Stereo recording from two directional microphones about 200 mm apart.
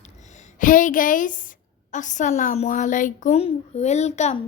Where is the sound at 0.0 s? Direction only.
35° left (ahead or behind).